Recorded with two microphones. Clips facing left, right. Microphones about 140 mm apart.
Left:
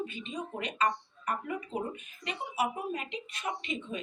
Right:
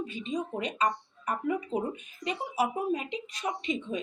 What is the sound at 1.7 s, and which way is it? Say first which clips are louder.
Speech: right 4 dB; 40° right (ahead or behind).